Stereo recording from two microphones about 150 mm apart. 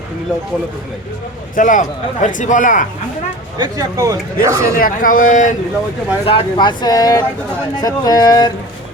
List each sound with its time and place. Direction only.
1.5 s speech: 60° left (ahead or behind)
3.6 s speech: 25° right (ahead or behind)
4.8 s speech: 65° left (ahead or behind)
6.2 s speech: 35° left (ahead or behind)